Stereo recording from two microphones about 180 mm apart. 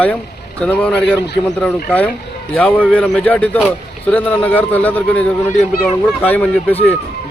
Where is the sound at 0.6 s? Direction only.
5° left (ahead or behind).